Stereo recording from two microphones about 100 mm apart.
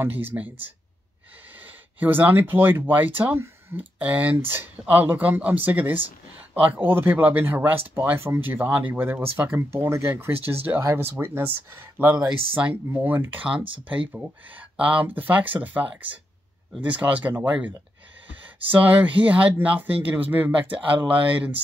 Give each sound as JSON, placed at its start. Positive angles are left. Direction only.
{"t": 0.0, "sound": "speech", "side_deg": -20}